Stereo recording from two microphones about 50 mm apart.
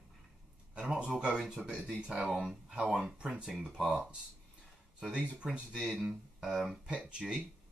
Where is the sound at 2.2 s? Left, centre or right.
Centre.